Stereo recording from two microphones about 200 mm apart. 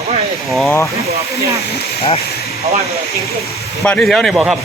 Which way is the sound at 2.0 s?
30° left (ahead or behind).